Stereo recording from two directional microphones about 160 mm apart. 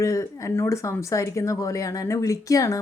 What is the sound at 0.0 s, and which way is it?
Speech, 20° left (ahead or behind).